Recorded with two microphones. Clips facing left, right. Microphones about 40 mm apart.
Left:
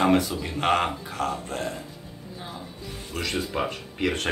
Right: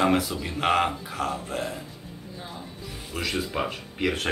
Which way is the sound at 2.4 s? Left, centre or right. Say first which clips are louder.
Left 1 dB; centre.